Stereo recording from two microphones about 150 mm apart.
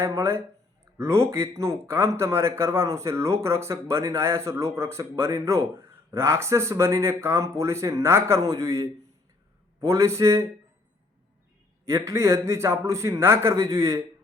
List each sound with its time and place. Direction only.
0.0 s speech: 20° right (ahead or behind)
11.9 s speech: 20° right (ahead or behind)